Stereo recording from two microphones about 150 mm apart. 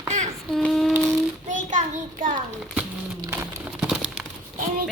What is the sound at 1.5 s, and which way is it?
Child singing, 55° right (ahead or behind).